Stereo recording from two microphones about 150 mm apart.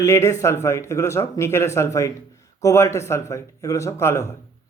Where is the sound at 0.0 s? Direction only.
20° left (ahead or behind).